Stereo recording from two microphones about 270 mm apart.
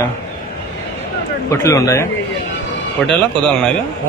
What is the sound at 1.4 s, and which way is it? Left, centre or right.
Speech, centre.